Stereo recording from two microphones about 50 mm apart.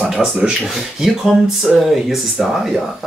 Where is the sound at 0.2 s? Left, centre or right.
Centre.